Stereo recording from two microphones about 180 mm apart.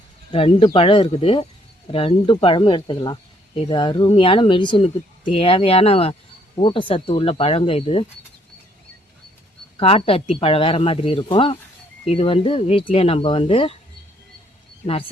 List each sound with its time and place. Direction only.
0.3 s speech: 30° left (ahead or behind)
9.7 s speech: 30° left (ahead or behind)